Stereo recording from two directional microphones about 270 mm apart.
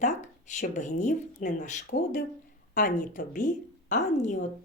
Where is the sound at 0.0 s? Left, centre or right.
Left.